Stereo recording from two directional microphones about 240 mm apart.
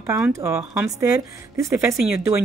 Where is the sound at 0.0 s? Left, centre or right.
Centre.